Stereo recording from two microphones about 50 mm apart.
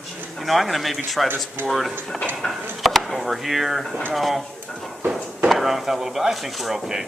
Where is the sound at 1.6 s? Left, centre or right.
Right.